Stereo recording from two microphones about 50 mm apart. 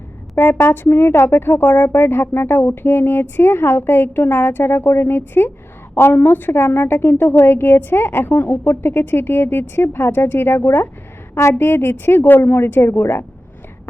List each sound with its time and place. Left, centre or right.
0.3 s speech: left